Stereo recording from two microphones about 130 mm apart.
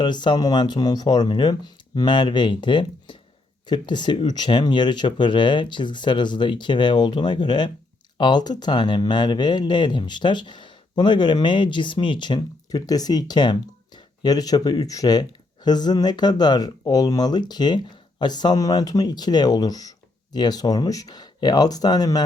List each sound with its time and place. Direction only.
0.0 s speech: 35° left (ahead or behind)